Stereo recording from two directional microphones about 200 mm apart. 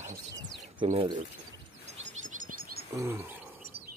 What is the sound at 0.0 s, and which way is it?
Bird, 15° right (ahead or behind).